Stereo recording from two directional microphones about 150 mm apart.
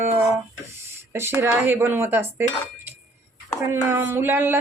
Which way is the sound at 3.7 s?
15° right (ahead or behind).